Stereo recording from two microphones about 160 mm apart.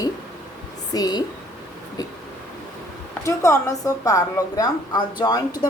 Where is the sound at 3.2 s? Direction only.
20° left (ahead or behind).